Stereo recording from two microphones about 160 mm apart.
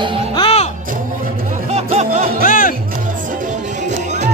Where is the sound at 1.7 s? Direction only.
40° right (ahead or behind).